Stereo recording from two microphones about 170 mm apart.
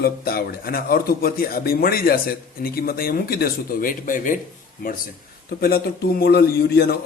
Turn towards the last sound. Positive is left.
turn(degrees=65)  # may be behind; listen again after turning